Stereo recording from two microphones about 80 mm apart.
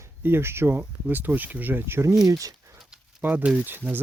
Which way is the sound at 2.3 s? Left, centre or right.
Right.